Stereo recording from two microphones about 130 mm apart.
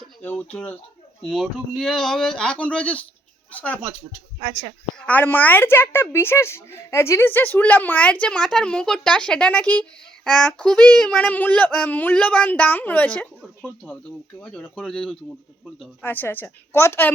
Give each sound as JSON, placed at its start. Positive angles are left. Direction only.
{"t": 0.2, "sound": "speech", "side_deg": 15}
{"t": 4.4, "sound": "speech", "side_deg": -30}
{"t": 4.9, "sound": "speech", "side_deg": 10}